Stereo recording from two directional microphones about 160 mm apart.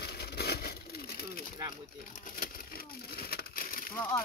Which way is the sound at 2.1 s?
55° left (ahead or behind).